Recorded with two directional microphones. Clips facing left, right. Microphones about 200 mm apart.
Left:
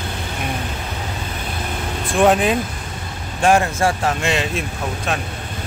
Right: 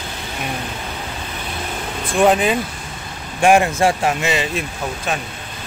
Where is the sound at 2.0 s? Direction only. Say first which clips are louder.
Even; centre (ahead or behind).